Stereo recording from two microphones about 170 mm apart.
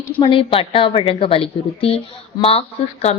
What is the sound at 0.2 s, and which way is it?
A woman's voice, 30° left (ahead or behind).